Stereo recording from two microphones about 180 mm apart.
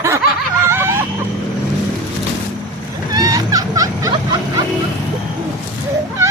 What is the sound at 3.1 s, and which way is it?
Vehicle, 20° right (ahead or behind).